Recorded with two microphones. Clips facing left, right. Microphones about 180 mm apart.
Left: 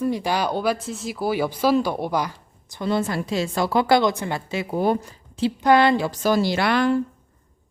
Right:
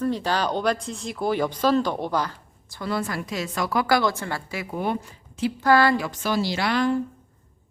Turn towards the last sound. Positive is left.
turn(degrees=70)  # may be behind; listen again after turning